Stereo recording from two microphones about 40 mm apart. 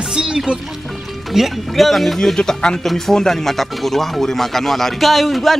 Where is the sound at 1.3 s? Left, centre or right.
Centre.